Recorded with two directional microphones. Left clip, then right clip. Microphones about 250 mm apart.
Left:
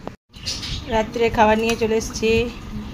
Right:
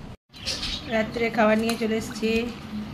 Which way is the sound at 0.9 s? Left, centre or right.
Centre.